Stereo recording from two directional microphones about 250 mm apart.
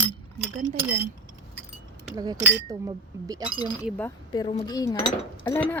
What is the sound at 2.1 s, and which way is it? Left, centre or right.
Speech, centre.